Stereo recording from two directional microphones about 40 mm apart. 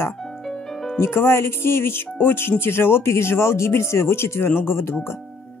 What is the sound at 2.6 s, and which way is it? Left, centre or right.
Speech, left.